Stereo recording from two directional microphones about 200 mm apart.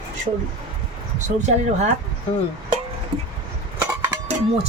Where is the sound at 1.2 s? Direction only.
40° right (ahead or behind).